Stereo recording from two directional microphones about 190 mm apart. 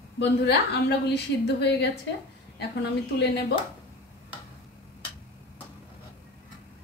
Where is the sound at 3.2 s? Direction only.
60° left (ahead or behind).